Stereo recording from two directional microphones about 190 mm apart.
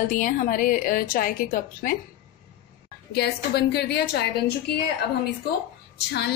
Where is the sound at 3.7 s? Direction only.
60° left (ahead or behind).